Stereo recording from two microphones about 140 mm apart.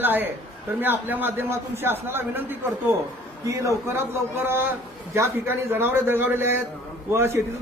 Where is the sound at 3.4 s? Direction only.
20° right (ahead or behind).